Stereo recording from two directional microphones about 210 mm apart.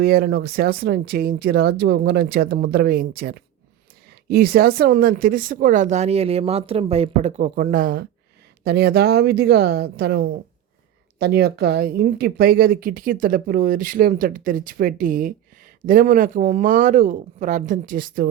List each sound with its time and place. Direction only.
0.0 s speech: 45° right (ahead or behind)